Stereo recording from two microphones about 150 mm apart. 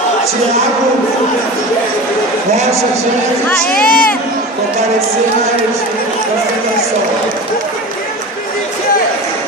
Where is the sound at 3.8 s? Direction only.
70° left (ahead or behind).